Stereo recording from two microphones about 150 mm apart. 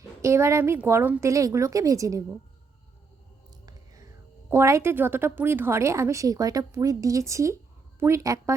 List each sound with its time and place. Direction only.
0.2 s a woman's voice: 20° right (ahead or behind)
3.7 s a woman's voice: 20° right (ahead or behind)